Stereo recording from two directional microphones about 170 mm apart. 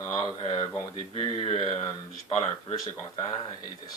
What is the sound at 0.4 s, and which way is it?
Speech, 35° left (ahead or behind).